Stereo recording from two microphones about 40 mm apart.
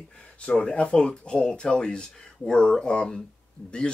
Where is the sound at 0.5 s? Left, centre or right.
Centre.